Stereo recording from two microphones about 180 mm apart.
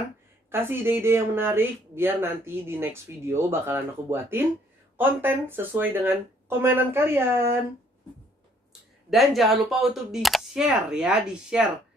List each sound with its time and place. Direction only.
0.5 s speech: 10° right (ahead or behind)
9.1 s speech: centre (ahead or behind)